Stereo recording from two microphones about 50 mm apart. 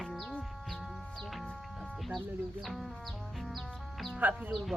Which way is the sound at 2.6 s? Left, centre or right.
Centre.